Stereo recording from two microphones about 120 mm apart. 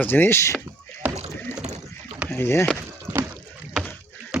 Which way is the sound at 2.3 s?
20° left (ahead or behind).